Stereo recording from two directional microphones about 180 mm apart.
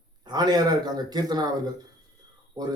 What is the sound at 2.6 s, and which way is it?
Speech, 20° right (ahead or behind).